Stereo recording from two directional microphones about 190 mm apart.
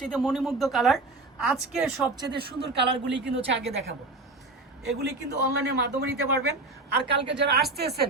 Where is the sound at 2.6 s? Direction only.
65° right (ahead or behind).